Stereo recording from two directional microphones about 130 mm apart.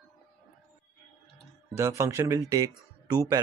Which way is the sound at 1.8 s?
20° right (ahead or behind).